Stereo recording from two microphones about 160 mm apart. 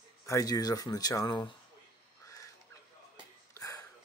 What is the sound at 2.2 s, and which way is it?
Fowl, 20° left (ahead or behind).